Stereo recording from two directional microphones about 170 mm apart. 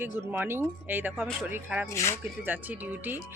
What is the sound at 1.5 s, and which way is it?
Speech, 10° right (ahead or behind).